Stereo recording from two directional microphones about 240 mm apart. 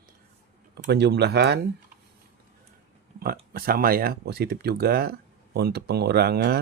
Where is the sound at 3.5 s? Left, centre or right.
Right.